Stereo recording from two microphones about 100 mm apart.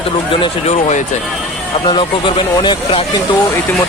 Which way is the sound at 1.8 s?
50° left (ahead or behind).